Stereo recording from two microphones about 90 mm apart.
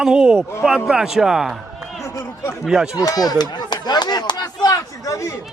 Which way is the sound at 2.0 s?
30° left (ahead or behind).